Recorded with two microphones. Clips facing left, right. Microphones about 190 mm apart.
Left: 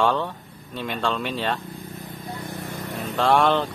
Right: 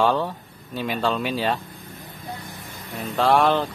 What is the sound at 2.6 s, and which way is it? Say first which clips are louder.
Vehicle: even; 65° left (ahead or behind).